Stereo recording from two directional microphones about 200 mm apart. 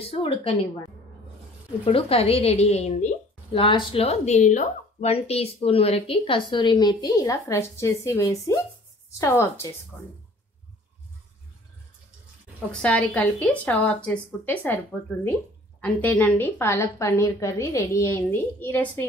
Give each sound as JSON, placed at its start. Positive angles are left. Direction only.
{"t": 0.0, "sound": "a woman's voice", "side_deg": 30}
{"t": 1.9, "sound": "a woman's voice", "side_deg": 30}
{"t": 12.8, "sound": "a woman's voice", "side_deg": 5}